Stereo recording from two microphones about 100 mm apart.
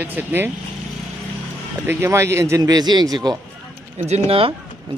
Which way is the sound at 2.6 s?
40° right (ahead or behind).